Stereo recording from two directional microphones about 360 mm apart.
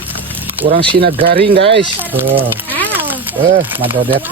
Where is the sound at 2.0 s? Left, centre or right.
Centre.